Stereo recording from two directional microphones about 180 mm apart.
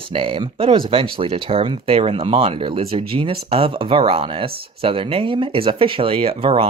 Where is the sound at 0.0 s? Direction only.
30° right (ahead or behind).